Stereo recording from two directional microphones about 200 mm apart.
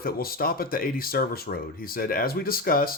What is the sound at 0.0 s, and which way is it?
Speech, 50° left (ahead or behind).